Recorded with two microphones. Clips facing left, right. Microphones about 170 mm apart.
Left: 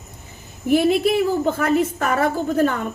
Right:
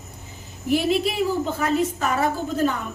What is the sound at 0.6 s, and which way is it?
A woman's voice, 55° left (ahead or behind).